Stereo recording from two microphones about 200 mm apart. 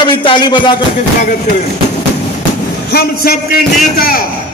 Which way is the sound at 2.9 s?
50° left (ahead or behind).